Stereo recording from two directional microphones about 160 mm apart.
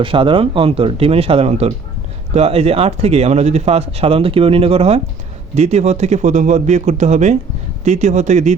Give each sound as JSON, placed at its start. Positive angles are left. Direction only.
{"t": 0.0, "sound": "speech", "side_deg": -35}